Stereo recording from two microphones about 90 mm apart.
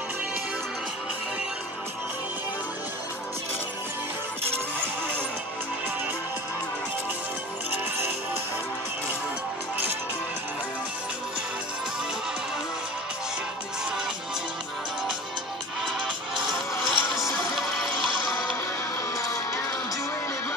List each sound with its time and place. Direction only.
16.8 s music: centre (ahead or behind)
19.1 s music: 35° left (ahead or behind)